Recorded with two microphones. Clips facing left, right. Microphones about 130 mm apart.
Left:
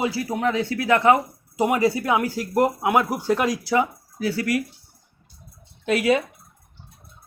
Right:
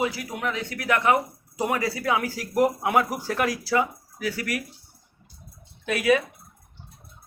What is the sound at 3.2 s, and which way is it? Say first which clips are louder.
Speech: left 4 dB; 20° left (ahead or behind).